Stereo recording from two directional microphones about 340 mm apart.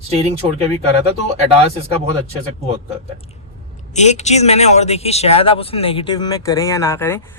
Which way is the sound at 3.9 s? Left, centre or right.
Centre.